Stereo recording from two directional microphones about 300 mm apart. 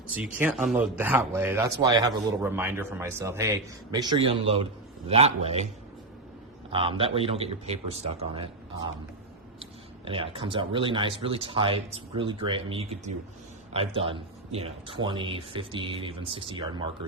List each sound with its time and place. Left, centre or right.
0.1 s speech: centre
6.7 s a man's voice: centre
10.1 s speech: centre